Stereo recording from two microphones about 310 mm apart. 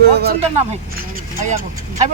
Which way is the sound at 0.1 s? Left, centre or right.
Right.